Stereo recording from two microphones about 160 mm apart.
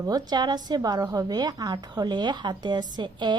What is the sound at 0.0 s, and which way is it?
A woman's voice, 25° right (ahead or behind).